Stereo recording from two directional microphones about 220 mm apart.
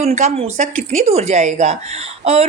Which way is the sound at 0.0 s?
30° right (ahead or behind).